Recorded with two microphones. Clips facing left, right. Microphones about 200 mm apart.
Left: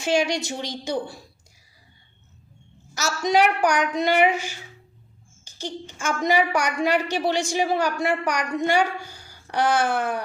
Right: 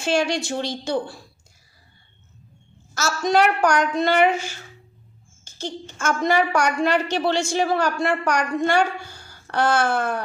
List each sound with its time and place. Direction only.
0.0 s a woman's voice: 15° left (ahead or behind)
2.9 s a woman's voice: 15° left (ahead or behind)